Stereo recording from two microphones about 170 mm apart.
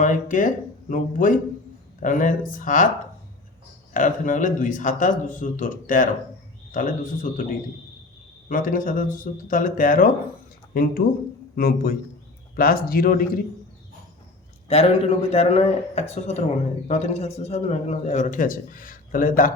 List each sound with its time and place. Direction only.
0.0 s a man's voice: 50° left (ahead or behind)
3.9 s a man's voice: 50° left (ahead or behind)
8.4 s a man's voice: 50° left (ahead or behind)
11.5 s speech: 60° left (ahead or behind)
14.7 s a man's voice: 35° left (ahead or behind); by 19.5 s 55° left (ahead or behind)